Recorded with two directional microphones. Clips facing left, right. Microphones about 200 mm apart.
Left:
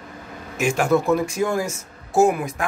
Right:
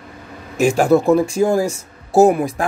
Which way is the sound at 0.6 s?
35° right (ahead or behind).